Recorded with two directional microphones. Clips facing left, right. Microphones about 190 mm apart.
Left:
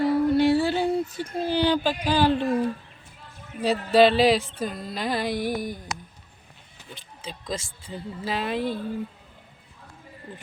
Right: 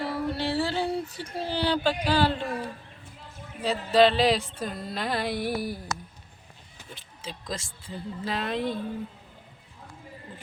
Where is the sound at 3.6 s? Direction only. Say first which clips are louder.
Left 3 dB; 10° left (ahead or behind).